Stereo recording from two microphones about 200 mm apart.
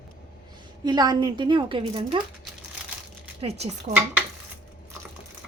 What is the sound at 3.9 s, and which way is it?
Speech, 40° right (ahead or behind).